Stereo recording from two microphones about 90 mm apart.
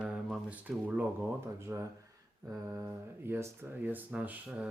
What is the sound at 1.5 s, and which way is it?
Speech, 30° right (ahead or behind).